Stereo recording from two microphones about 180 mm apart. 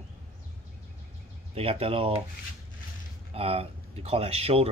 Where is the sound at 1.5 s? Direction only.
35° right (ahead or behind).